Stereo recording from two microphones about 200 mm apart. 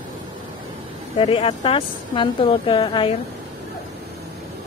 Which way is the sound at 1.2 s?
30° left (ahead or behind).